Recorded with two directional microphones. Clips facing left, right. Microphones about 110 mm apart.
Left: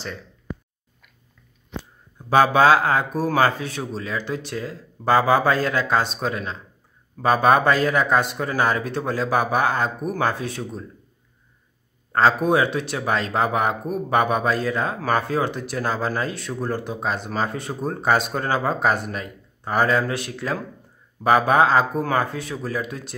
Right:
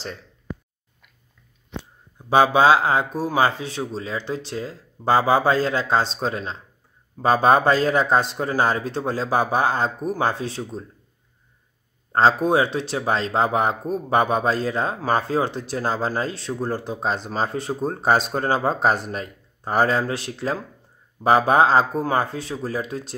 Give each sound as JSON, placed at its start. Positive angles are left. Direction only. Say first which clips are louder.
{"t": 2.2, "sound": "speech", "louder": "even", "side_deg": -20}
{"t": 12.1, "sound": "speech", "louder": "even", "side_deg": -30}